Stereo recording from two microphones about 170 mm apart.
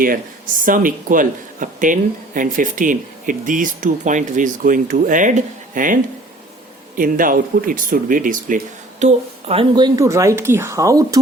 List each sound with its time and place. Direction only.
0.6 s speech: 55° right (ahead or behind); by 11.2 s 20° right (ahead or behind)